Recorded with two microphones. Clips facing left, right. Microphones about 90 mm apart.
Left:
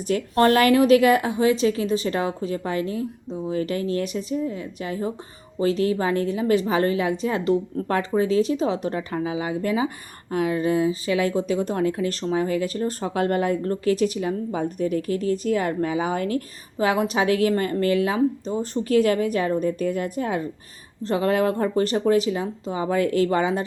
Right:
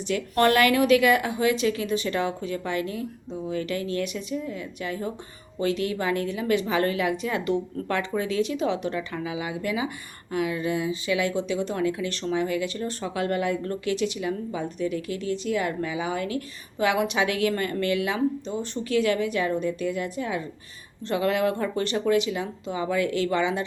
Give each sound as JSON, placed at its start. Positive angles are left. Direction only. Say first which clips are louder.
{"t": 0.1, "sound": "speech", "louder": "left 3 dB", "side_deg": 30}
{"t": 21.0, "sound": "speech", "louder": "left 3 dB", "side_deg": 35}